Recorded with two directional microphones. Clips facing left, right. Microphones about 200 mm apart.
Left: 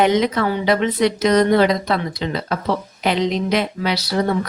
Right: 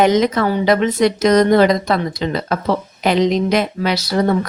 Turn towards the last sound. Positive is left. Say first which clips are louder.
# right 3 dB
turn(degrees=-45)  # may be behind; listen again after turning